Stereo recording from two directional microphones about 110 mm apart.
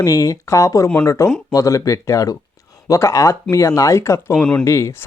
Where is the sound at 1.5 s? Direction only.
30° left (ahead or behind).